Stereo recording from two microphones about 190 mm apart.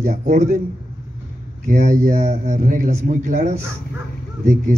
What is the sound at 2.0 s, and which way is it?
A man's voice, 40° right (ahead or behind).